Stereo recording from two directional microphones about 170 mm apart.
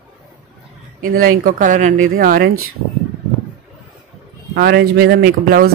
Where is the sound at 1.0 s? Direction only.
55° right (ahead or behind).